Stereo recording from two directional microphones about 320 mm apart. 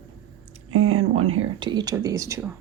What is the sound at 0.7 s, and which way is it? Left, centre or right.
Speech, right.